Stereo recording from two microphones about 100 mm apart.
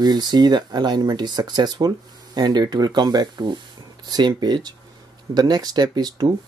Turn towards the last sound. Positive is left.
turn(degrees=-40)  # may be behind; listen again after turning